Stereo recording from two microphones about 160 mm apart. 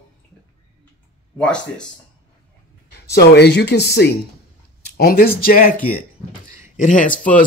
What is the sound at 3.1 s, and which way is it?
Speech, 90° left.